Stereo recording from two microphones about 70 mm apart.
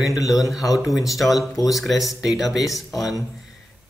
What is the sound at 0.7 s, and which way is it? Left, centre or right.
Speech, left.